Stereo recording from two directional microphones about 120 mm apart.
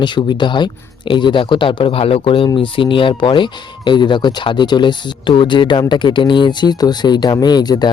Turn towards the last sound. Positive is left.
turn(degrees=35)  # may be behind; listen again after turning